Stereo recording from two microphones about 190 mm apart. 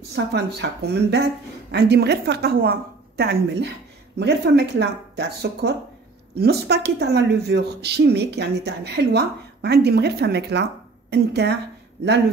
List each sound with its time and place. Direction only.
0.1 s speech: 60° right (ahead or behind)